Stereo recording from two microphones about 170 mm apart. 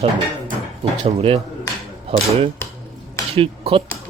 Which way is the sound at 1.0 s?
35° right (ahead or behind).